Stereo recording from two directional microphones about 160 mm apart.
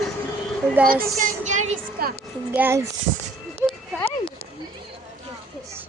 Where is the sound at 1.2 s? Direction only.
50° right (ahead or behind).